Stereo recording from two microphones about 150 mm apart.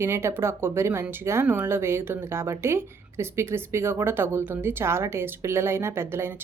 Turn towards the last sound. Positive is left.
turn(degrees=-15)  # may be behind; listen again after turning